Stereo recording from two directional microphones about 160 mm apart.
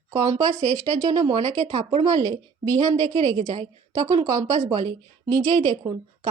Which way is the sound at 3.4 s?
45° right (ahead or behind).